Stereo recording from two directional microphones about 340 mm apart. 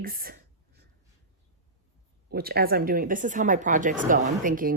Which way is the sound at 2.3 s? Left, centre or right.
Right.